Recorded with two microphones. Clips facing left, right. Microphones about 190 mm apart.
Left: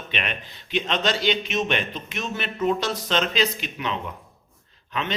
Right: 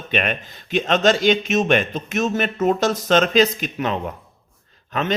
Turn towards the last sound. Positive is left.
turn(degrees=-45)  # may be behind; listen again after turning